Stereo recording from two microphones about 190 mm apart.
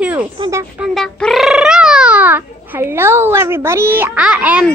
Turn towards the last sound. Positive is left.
turn(degrees=-5)  # may be behind; listen again after turning